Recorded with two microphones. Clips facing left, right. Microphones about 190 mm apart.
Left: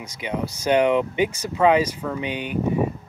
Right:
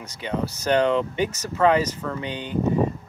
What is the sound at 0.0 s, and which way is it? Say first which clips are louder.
Speech: even; 15° left (ahead or behind).